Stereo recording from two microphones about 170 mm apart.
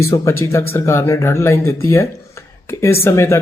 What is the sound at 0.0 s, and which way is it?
Speech, 15° left (ahead or behind).